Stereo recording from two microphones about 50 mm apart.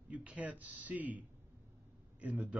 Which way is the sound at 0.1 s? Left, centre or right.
Right.